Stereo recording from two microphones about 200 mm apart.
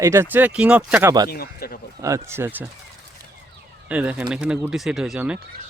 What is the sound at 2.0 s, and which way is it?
Speech, 15° right (ahead or behind).